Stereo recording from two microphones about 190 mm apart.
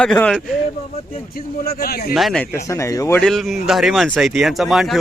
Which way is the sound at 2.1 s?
Centre (ahead or behind).